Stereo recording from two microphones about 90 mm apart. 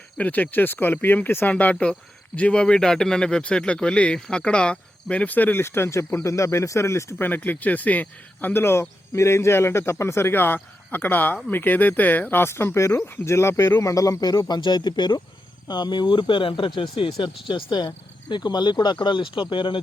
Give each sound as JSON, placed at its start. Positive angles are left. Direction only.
{"t": 0.2, "sound": "speech", "side_deg": 15}